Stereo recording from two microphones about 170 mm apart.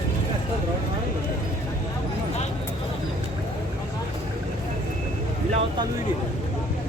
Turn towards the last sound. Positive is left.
turn(degrees=-35)  # may be behind; listen again after turning